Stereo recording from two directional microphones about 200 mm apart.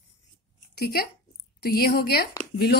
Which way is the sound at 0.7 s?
50° left (ahead or behind).